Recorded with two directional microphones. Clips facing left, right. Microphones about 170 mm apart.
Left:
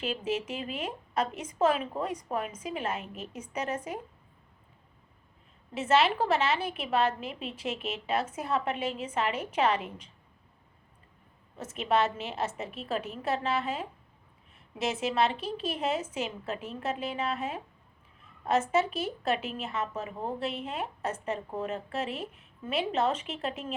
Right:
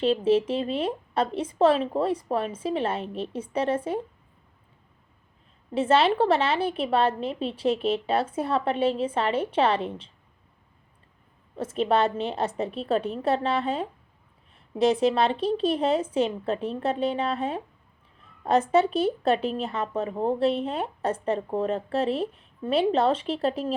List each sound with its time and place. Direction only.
0.0 s speech: 30° right (ahead or behind)
5.7 s speech: 30° right (ahead or behind)
11.5 s speech: 30° right (ahead or behind)